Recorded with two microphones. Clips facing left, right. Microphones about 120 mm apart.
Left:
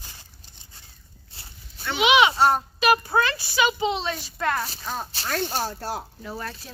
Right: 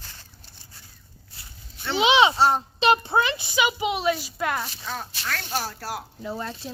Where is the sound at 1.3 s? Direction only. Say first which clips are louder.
Left 1 dB; 30° left (ahead or behind).